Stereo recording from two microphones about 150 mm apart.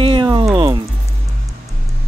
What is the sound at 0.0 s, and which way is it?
Music, 35° right (ahead or behind).